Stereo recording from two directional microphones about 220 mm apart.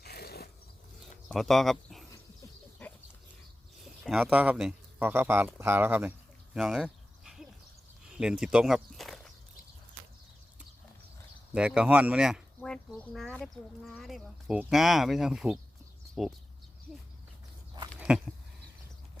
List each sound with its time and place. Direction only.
0.0 s a sound: 45° left (ahead or behind)
1.3 s speech: centre (ahead or behind)
2.8 s goat: 5° left (ahead or behind)
3.8 s speech: centre (ahead or behind)
5.5 s a sound: 10° right (ahead or behind)
8.1 s speech: 5° right (ahead or behind)
11.5 s speech: 5° right (ahead or behind)
17.7 s goat: 20° right (ahead or behind)